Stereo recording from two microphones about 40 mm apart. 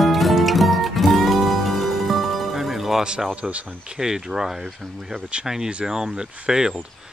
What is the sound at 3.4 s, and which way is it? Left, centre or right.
Speech, right.